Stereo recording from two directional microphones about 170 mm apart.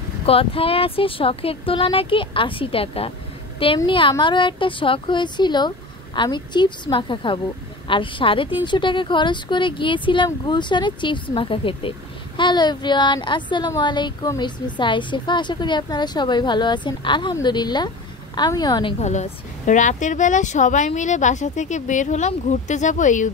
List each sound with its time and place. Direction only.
0.3 s speech: 35° left (ahead or behind)
18.9 s speech: 45° left (ahead or behind)